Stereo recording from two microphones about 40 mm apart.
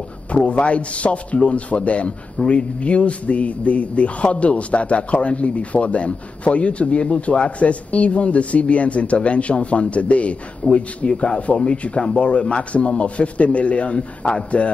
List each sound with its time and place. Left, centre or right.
0.3 s a man's voice: left